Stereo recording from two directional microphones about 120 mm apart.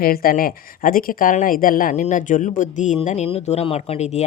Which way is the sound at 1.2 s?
90° left.